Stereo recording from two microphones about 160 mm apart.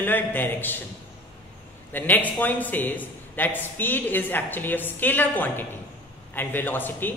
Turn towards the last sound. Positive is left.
turn(degrees=10)  # may be behind; listen again after turning